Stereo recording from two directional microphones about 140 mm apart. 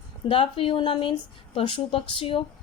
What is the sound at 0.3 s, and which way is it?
A woman's voice, 40° left (ahead or behind).